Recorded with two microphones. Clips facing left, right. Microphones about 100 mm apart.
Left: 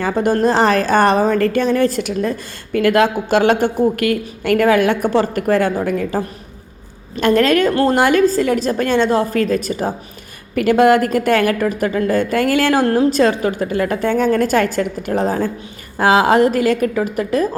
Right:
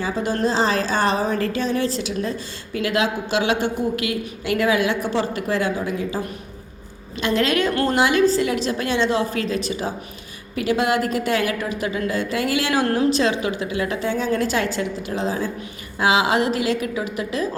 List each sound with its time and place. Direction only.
0.0 s a woman's voice: 55° left (ahead or behind)
7.7 s a woman's voice: 35° left (ahead or behind)
7.9 s a woman's voice: 45° left (ahead or behind)
12.8 s a woman's voice: 35° left (ahead or behind)